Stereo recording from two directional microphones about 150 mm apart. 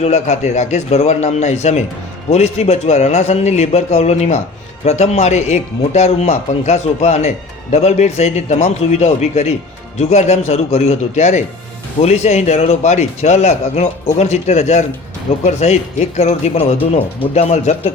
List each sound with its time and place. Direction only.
0.0 s a man's voice: 50° left (ahead or behind)